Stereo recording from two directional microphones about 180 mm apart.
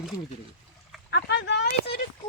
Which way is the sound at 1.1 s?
75° left (ahead or behind).